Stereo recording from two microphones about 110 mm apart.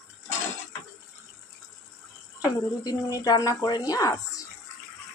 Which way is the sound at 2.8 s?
35° left (ahead or behind).